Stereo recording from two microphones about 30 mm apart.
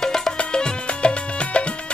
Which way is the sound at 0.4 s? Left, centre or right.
Left.